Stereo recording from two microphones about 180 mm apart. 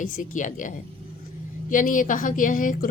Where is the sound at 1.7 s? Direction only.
50° left (ahead or behind).